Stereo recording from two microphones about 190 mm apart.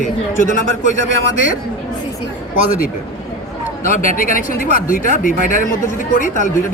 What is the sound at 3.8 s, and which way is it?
A woman's voice, 45° left (ahead or behind).